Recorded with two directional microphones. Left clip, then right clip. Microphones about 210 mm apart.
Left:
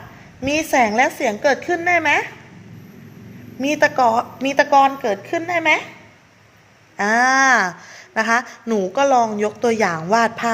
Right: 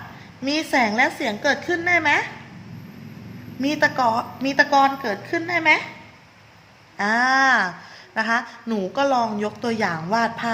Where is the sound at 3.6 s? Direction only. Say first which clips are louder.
Left 4 dB; 30° left (ahead or behind).